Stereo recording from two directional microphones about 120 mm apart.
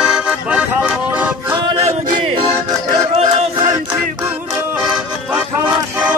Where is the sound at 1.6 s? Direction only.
50° right (ahead or behind).